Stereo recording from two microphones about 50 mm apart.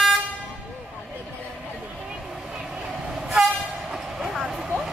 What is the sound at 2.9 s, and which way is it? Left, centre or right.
Train, centre.